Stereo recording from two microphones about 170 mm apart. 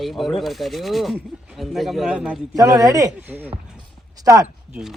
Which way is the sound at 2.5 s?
20° right (ahead or behind).